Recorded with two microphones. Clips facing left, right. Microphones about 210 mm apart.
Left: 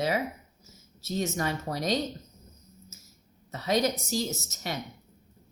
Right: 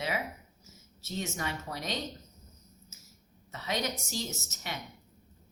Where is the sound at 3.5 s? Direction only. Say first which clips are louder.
Left 8 dB; 40° left (ahead or behind).